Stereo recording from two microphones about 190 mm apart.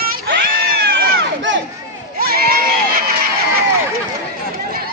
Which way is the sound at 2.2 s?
50° right (ahead or behind).